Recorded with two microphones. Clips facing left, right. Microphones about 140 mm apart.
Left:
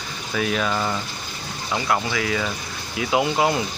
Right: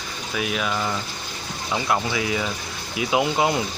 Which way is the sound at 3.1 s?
20° left (ahead or behind).